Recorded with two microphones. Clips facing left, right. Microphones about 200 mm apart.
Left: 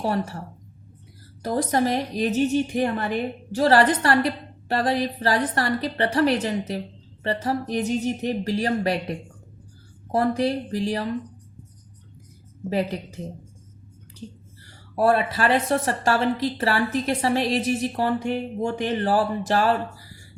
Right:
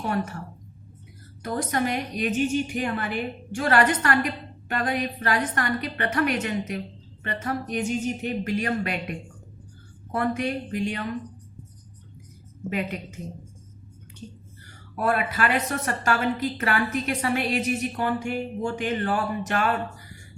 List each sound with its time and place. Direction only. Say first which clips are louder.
0.0 s a woman's voice: left 2 dB; 35° left (ahead or behind)
12.7 s a woman's voice: left 5 dB; 35° left (ahead or behind)
14.6 s a woman's voice: left 6 dB; 30° left (ahead or behind)